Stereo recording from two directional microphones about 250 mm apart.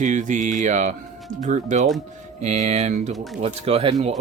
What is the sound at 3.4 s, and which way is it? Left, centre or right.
Speech, right.